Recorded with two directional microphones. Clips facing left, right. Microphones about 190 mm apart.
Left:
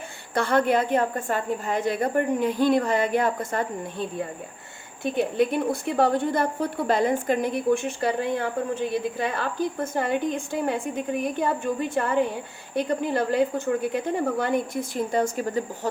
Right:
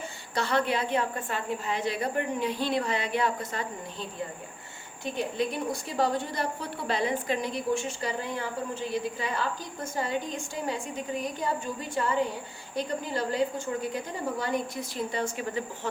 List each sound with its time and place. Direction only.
0.3 s a woman's voice: 50° left (ahead or behind)
5.1 s a woman's voice: 55° left (ahead or behind)